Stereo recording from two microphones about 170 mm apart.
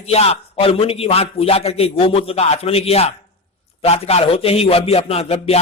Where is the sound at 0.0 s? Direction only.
35° left (ahead or behind).